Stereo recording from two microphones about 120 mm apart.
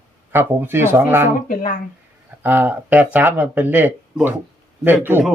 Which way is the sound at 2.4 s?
15° right (ahead or behind).